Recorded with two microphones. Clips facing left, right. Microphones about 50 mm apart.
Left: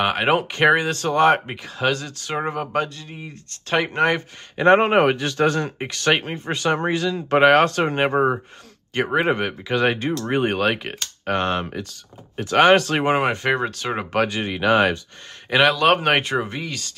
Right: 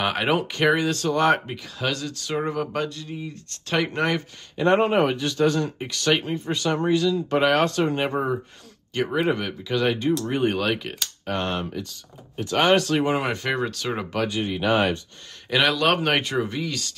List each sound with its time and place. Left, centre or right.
0.0 s speech: left
4.6 s speech: left
12.4 s speech: left
13.3 s speech: left
14.1 s speech: left
15.5 s speech: left